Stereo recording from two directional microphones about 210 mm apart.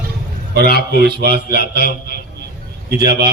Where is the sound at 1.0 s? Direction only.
50° right (ahead or behind).